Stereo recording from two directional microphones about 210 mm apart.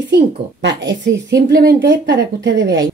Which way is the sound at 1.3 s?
50° right (ahead or behind).